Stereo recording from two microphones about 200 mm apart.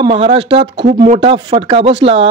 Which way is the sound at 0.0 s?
25° right (ahead or behind).